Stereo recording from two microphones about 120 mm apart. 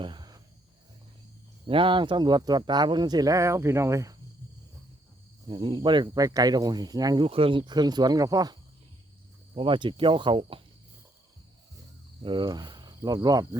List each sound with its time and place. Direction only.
0.0 s cricket: 40° right (ahead or behind)
1.6 s speech: 45° right (ahead or behind); by 4.1 s 25° right (ahead or behind)
5.5 s speech: 40° right (ahead or behind)
7.3 s speech: 50° right (ahead or behind); by 8.5 s 30° right (ahead or behind)
9.6 s speech: 45° right (ahead or behind)
12.2 s speech: 40° right (ahead or behind)